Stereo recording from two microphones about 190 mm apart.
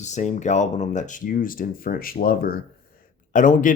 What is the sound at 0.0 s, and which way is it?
Speech, 40° left (ahead or behind).